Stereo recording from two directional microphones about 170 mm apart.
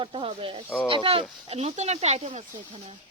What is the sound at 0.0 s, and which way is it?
Speech, 30° right (ahead or behind).